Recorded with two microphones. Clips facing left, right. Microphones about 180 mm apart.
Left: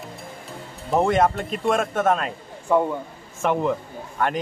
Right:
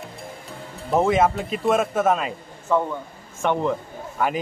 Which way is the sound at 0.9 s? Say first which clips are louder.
Even; centre (ahead or behind).